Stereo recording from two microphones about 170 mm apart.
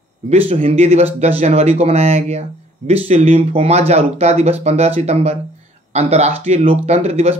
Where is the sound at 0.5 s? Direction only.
35° right (ahead or behind).